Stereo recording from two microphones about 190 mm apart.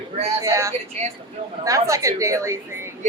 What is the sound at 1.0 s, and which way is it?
Speech, 35° right (ahead or behind).